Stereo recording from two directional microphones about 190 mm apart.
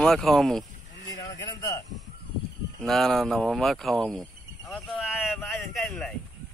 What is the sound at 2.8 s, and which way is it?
Speech, centre (ahead or behind).